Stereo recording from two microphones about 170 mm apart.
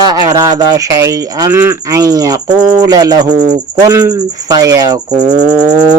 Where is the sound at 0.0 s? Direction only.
25° right (ahead or behind).